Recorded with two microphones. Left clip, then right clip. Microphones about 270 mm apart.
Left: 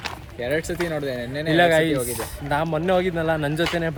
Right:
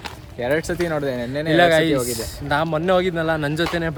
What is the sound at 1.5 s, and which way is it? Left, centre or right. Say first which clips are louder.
Speech: right 2 dB; centre.